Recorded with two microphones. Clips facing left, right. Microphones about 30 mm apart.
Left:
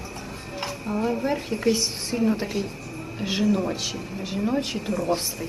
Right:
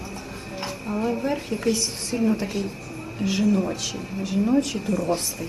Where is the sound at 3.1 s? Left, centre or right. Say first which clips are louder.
Right 3 dB; left.